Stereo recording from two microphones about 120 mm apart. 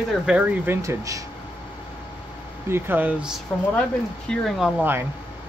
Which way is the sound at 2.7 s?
15° right (ahead or behind).